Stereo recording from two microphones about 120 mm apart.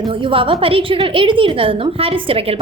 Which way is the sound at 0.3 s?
50° right (ahead or behind).